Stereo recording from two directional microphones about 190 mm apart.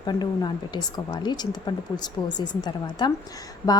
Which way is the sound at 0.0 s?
20° left (ahead or behind).